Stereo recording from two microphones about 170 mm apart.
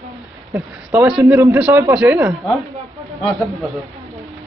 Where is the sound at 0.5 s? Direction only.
20° right (ahead or behind).